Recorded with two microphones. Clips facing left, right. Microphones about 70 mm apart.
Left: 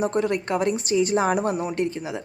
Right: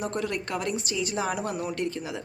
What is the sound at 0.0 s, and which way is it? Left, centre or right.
Speech, left.